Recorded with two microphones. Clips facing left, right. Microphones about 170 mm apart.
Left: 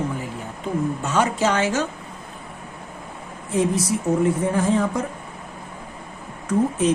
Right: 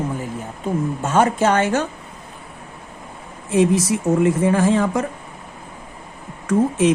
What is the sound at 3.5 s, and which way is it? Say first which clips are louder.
Speech: right 4 dB; 90° right.